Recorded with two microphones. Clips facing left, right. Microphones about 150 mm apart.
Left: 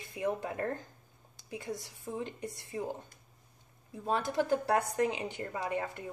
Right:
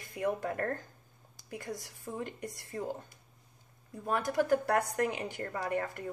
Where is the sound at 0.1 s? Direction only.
20° left (ahead or behind).